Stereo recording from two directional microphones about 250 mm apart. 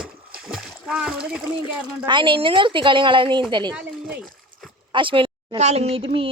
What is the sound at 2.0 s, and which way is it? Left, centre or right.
Speech, centre.